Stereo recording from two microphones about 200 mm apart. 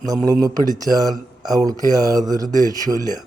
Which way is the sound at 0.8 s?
20° right (ahead or behind).